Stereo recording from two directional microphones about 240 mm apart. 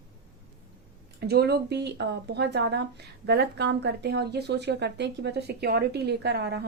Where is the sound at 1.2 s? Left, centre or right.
Right.